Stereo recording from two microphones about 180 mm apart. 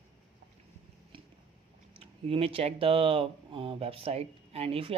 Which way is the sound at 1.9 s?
30° right (ahead or behind).